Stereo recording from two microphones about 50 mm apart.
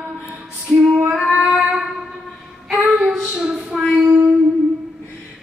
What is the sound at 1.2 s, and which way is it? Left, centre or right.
Child singing, centre.